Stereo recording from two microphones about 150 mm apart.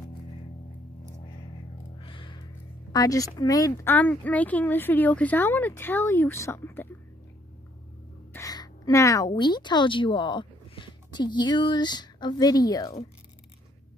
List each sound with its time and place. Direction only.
2.0 s music: 35° left (ahead or behind)
2.9 s speech: 25° left (ahead or behind)
3.9 s speech: 10° left (ahead or behind)
8.3 s a woman's voice: 20° left (ahead or behind)